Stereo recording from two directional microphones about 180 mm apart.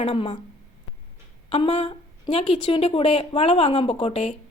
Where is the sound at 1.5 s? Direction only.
30° left (ahead or behind).